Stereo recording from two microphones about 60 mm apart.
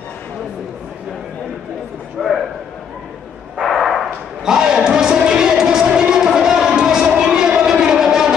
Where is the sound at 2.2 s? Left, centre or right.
Centre.